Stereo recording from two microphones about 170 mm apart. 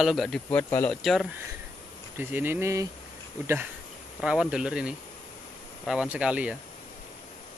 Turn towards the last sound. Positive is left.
turn(degrees=-5)  # may be behind; listen again after turning